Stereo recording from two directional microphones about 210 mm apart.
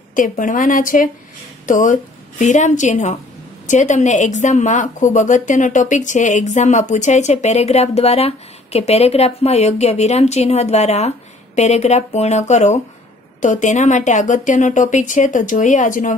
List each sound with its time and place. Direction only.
0.1 s a woman's voice: 40° left (ahead or behind)